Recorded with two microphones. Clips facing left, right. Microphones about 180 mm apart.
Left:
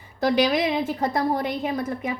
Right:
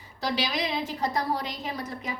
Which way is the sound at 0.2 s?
50° left (ahead or behind).